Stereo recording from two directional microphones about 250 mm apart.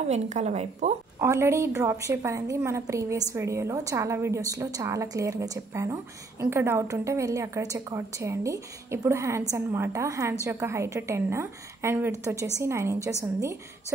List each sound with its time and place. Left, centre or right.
0.1 s a woman's voice: right
1.2 s a woman's voice: centre